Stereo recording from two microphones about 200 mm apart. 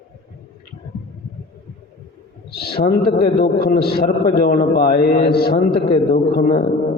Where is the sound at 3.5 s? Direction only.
50° left (ahead or behind).